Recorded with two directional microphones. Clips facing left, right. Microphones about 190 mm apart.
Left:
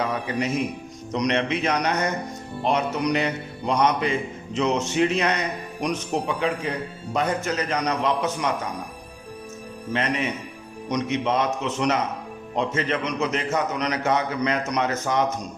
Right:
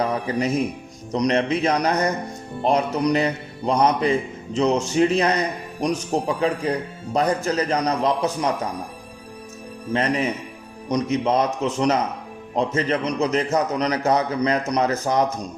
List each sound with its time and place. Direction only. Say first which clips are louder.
0.0 s a man's voice: right 3 dB; 35° right (ahead or behind)
9.9 s speech: right 4 dB; 35° right (ahead or behind)